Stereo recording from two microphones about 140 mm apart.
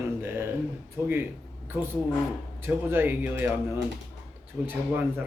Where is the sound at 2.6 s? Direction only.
15° right (ahead or behind).